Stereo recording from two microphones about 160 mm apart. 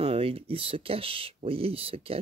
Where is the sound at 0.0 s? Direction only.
35° right (ahead or behind).